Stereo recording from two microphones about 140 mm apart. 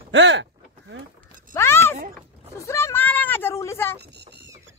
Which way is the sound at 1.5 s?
20° left (ahead or behind).